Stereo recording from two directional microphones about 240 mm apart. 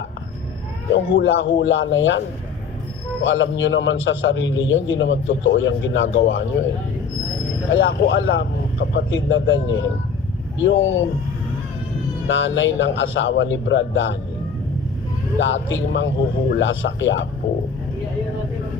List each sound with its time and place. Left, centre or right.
0.9 s a man's voice: left
3.2 s a man's voice: left
7.7 s a man's voice: left
12.3 s a man's voice: left
15.4 s a man's voice: left